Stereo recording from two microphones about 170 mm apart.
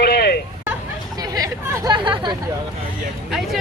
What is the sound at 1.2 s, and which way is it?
Speech, 20° right (ahead or behind).